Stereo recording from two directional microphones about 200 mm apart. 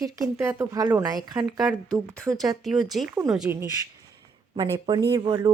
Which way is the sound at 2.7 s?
20° right (ahead or behind).